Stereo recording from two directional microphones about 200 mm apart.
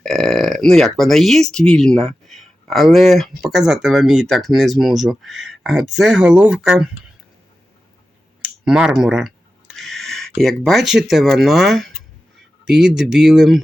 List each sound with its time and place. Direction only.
0.0 s speech: centre (ahead or behind)
8.6 s speech: 5° right (ahead or behind)